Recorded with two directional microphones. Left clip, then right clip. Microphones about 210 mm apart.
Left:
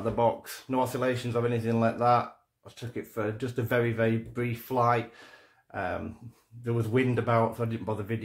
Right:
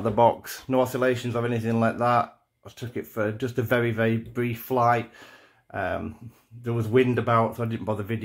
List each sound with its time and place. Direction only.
0.0 s speech: 45° right (ahead or behind)